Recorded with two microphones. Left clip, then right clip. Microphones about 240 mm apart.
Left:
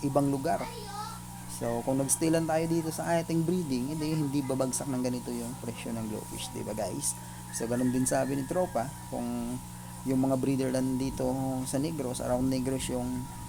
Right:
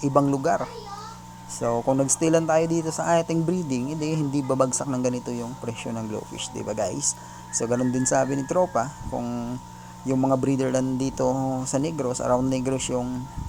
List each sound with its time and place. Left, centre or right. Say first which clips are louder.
0.0 s speech: right 7 dB; centre